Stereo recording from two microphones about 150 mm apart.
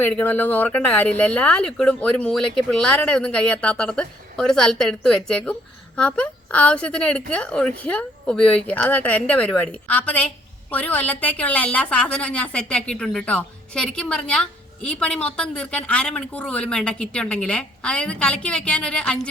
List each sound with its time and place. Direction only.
0.0 s a woman's voice: 10° left (ahead or behind)